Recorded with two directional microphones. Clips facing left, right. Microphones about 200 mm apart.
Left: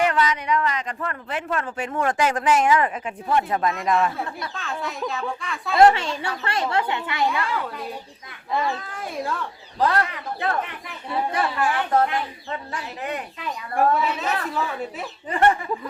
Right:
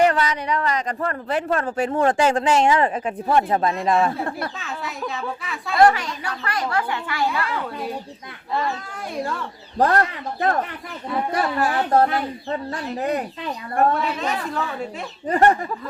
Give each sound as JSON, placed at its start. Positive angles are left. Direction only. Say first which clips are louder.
{"t": 0.0, "sound": "speech", "louder": "right 3 dB", "side_deg": -35}
{"t": 4.3, "sound": "speech", "louder": "right 5 dB", "side_deg": -55}
{"t": 4.5, "sound": "speech", "louder": "left 1 dB", "side_deg": 0}
{"t": 5.7, "sound": "speech", "louder": "left 1 dB", "side_deg": 25}
{"t": 7.3, "sound": "speech", "louder": "even", "side_deg": 0}
{"t": 9.7, "sound": "speech", "louder": "right 3 dB", "side_deg": -50}
{"t": 11.3, "sound": "speech", "louder": "right 2 dB", "side_deg": -40}
{"t": 13.7, "sound": "speech", "louder": "right 1 dB", "side_deg": 5}
{"t": 15.3, "sound": "speech", "louder": "right 3 dB", "side_deg": -40}